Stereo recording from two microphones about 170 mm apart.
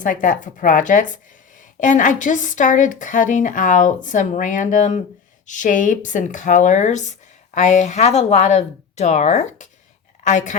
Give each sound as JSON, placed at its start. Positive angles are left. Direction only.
{"t": 0.0, "sound": "a woman's voice", "side_deg": 50}